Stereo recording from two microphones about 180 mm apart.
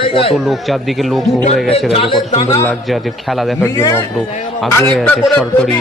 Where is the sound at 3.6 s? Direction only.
15° left (ahead or behind).